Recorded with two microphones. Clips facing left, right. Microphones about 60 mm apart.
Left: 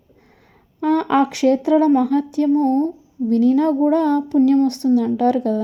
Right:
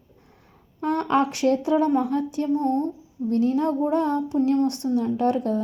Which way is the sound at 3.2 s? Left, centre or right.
Left.